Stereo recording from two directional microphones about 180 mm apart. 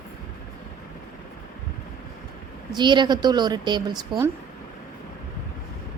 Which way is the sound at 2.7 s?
25° right (ahead or behind).